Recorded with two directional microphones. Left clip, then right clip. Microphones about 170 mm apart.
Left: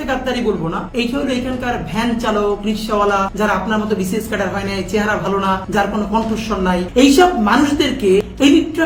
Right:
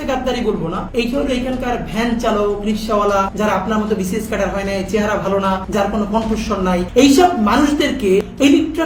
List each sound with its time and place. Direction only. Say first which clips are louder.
0.9 s a woman's voice: right 2 dB; 15° left (ahead or behind)
5.4 s a woman's voice: left 1 dB; 15° left (ahead or behind)